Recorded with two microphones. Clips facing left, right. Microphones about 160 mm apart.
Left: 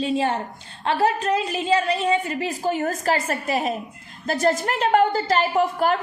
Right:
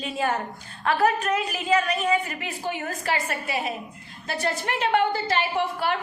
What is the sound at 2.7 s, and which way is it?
A woman's voice, 40° left (ahead or behind).